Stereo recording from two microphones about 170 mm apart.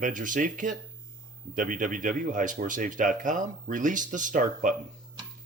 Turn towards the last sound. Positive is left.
turn(degrees=-50)  # may be behind; listen again after turning